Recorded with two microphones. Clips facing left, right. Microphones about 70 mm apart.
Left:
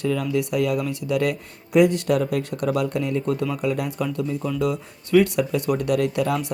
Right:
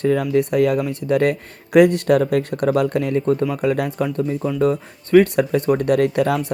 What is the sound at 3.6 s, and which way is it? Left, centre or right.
Speech, right.